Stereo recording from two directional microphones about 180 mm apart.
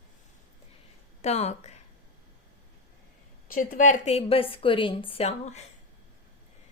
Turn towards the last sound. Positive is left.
turn(degrees=35)  # may be behind; listen again after turning